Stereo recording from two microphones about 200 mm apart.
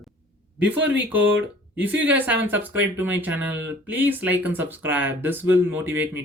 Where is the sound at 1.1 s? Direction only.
10° right (ahead or behind).